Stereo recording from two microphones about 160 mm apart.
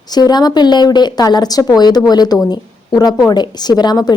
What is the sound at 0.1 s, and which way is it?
A woman's voice, 25° left (ahead or behind).